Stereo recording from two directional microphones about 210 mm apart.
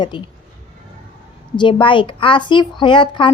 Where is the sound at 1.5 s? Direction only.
20° left (ahead or behind).